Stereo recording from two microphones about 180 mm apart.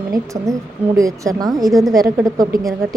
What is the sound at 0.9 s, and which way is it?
A woman's voice, 20° right (ahead or behind).